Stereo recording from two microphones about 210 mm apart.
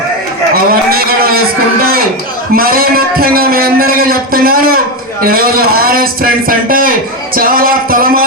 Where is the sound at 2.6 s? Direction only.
45° right (ahead or behind).